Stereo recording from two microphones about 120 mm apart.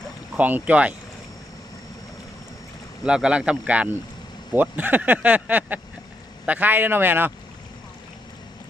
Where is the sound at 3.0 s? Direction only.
10° right (ahead or behind).